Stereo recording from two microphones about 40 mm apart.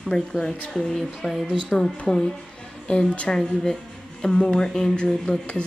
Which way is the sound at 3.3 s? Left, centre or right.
Centre.